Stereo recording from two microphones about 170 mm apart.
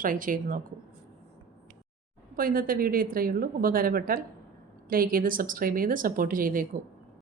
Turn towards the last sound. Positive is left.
turn(degrees=-55)  # may be behind; listen again after turning